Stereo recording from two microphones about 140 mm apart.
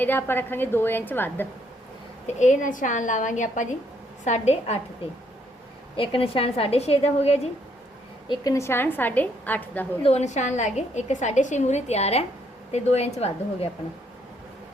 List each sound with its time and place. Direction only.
0.0 s a woman's voice: 15° left (ahead or behind)
2.2 s a woman's voice: 60° left (ahead or behind)
6.0 s a woman's voice: 40° left (ahead or behind)
8.3 s a woman's voice: 25° left (ahead or behind)
10.0 s a woman's voice: 50° left (ahead or behind)